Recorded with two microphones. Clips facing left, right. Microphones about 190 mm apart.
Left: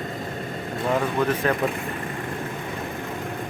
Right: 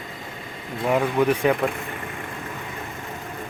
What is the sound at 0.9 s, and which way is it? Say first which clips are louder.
Speech: right 3 dB; 15° right (ahead or behind).